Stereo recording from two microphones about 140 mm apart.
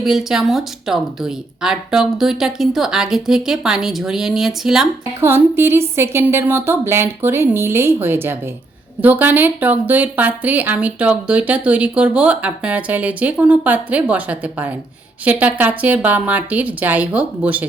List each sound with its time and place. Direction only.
0.0 s speech: 5° right (ahead or behind)
5.2 s speech: 15° right (ahead or behind)